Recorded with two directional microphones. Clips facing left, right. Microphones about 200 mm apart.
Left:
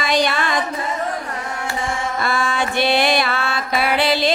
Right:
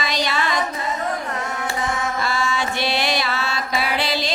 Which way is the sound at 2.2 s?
55° left (ahead or behind).